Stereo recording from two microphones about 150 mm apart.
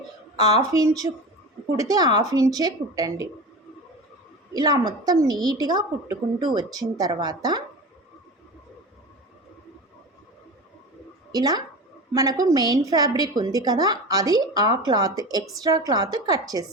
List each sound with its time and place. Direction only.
0.3 s a woman's voice: 25° right (ahead or behind)
4.5 s a woman's voice: 25° right (ahead or behind)
11.3 s a woman's voice: 25° right (ahead or behind)